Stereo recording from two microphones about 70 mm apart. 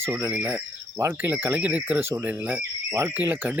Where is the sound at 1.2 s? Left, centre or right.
Right.